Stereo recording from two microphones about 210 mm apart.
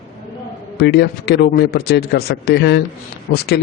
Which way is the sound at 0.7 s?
50° left (ahead or behind).